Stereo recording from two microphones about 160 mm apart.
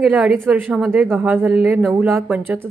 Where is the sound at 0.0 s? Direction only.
5° right (ahead or behind).